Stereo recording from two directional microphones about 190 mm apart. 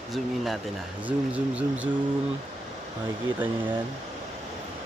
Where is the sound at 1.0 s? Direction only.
5° right (ahead or behind).